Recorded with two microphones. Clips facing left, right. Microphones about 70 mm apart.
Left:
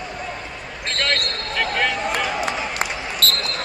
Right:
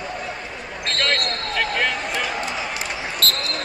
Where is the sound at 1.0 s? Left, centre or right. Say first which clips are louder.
Even; centre.